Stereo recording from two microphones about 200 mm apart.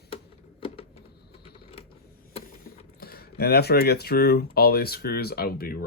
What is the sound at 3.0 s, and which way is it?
Speech, 50° left (ahead or behind).